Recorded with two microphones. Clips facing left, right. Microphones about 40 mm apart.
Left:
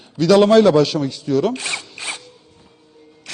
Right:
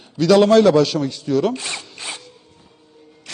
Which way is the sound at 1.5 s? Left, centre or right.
Left.